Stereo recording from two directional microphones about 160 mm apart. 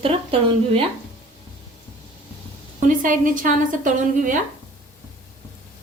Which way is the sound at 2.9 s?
55° right (ahead or behind).